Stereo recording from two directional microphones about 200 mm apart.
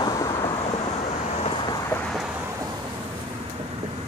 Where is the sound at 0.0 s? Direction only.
20° left (ahead or behind).